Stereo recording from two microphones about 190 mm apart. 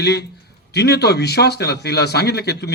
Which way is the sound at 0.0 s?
60° left (ahead or behind).